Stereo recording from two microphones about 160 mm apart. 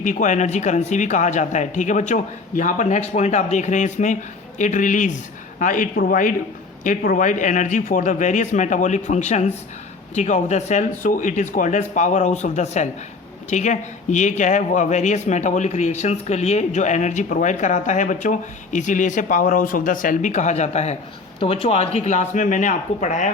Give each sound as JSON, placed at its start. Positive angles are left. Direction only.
{"t": 0.0, "sound": "speech", "side_deg": 50}